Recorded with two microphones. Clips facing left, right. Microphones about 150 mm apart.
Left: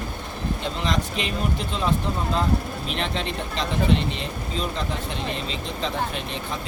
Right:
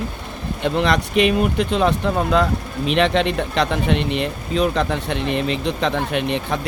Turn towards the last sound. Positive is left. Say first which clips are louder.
# right 9 dB
turn(degrees=-65)  # may be behind; listen again after turning